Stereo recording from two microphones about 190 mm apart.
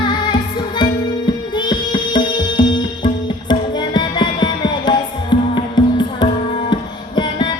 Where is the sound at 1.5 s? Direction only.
25° left (ahead or behind).